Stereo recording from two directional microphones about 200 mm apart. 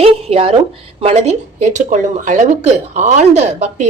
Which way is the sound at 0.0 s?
30° right (ahead or behind).